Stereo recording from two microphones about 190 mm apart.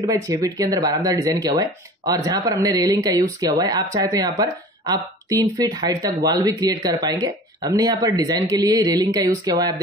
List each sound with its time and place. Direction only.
0.0 s speech: 20° right (ahead or behind)